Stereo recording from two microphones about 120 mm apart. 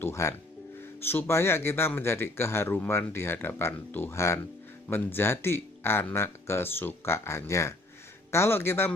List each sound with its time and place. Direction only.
0.0 s speech: 25° left (ahead or behind)